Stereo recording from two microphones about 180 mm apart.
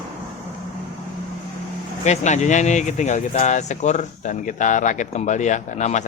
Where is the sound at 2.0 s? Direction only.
40° left (ahead or behind).